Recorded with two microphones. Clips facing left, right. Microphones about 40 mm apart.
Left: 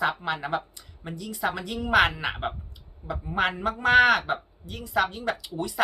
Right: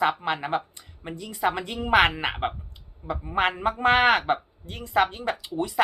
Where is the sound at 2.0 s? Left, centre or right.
Right.